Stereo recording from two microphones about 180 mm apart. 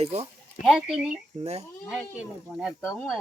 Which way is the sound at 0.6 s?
Centre (ahead or behind).